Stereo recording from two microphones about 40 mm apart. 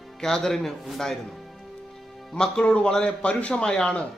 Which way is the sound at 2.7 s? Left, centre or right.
Left.